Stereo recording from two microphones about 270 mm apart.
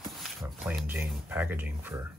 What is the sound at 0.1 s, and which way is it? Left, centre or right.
Speech, centre.